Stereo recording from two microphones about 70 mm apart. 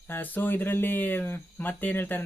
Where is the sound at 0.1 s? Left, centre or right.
Left.